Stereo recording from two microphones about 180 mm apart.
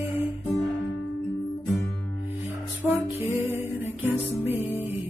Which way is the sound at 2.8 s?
10° right (ahead or behind).